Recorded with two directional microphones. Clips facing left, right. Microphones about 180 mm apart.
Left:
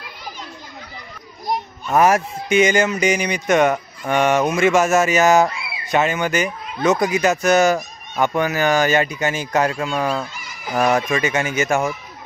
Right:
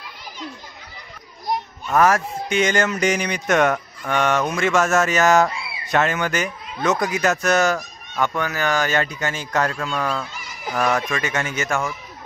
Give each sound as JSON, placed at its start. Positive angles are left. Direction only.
{"t": 1.5, "sound": "children playing", "side_deg": 15}
{"t": 2.5, "sound": "speech", "side_deg": 10}